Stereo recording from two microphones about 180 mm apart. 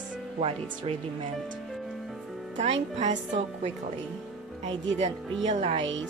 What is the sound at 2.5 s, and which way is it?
Speech, 40° right (ahead or behind).